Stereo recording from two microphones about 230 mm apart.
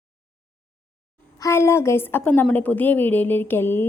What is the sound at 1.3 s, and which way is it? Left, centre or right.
A woman's voice, centre.